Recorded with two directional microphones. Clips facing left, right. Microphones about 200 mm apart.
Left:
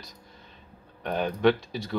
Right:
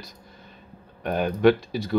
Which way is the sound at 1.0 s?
5° right (ahead or behind).